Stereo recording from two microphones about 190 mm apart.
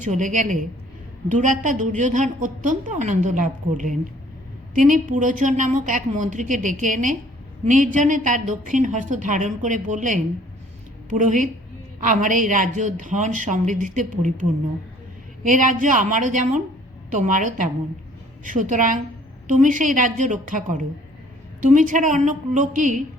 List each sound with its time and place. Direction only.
0.0 s a woman's voice: 40° right (ahead or behind)
15.4 s a woman's voice: 40° right (ahead or behind)